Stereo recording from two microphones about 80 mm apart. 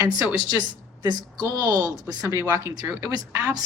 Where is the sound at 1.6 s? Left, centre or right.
Right.